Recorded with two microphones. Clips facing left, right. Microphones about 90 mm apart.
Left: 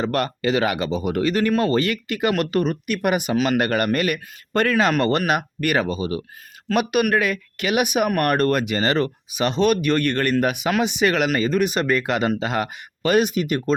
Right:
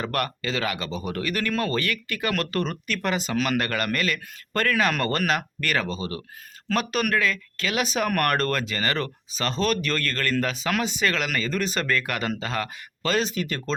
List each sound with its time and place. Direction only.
0.0 s speech: 25° left (ahead or behind)